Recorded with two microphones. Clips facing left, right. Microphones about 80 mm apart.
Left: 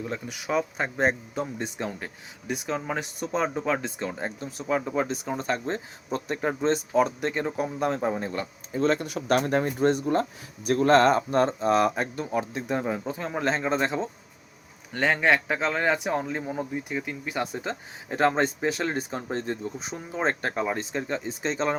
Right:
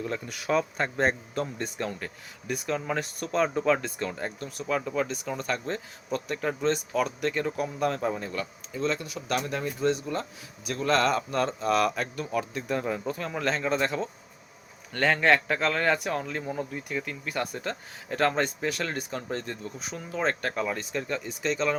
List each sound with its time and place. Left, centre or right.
0.0 s a man's voice: centre
8.8 s speech: left
14.9 s a man's voice: centre; by 21.8 s left